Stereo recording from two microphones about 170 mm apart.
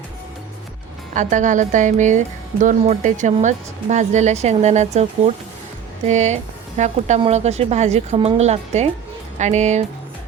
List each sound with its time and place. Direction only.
1.1 s speech: 45° right (ahead or behind)